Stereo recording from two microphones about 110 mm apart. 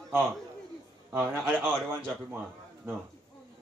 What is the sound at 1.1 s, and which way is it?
Speech, 25° right (ahead or behind).